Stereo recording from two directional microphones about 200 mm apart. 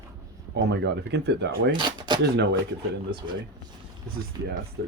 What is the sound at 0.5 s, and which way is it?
Speech, 60° right (ahead or behind).